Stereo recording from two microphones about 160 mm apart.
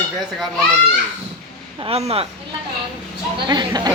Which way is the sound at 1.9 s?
40° right (ahead or behind).